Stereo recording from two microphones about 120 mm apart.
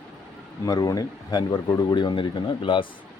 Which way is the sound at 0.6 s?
30° left (ahead or behind).